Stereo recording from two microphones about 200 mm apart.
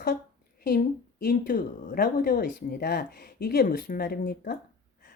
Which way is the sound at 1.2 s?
45° left (ahead or behind).